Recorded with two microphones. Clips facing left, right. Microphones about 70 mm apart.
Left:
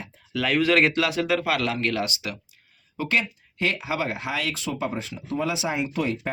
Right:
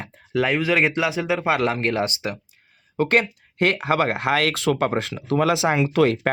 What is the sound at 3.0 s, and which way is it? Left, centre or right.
Speech, right.